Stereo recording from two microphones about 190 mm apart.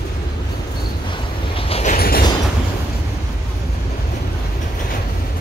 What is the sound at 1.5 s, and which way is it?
Vehicle, 35° left (ahead or behind).